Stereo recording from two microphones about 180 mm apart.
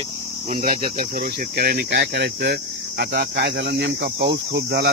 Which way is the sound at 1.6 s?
65° right (ahead or behind).